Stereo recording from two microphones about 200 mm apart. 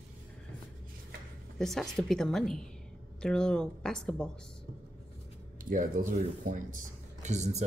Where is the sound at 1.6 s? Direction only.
Centre (ahead or behind).